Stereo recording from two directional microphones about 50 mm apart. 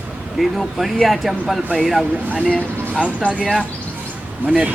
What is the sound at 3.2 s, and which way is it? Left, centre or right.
Speech, left.